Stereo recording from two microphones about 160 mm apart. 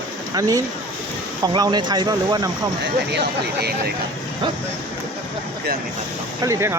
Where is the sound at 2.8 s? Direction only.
90° right.